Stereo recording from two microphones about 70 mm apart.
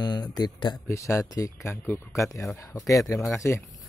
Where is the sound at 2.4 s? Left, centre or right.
Left.